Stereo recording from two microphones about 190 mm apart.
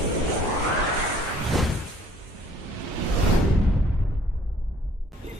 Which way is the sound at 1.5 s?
Centre (ahead or behind).